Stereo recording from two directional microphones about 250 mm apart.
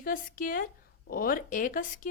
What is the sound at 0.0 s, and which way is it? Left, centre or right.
A woman's voice, left.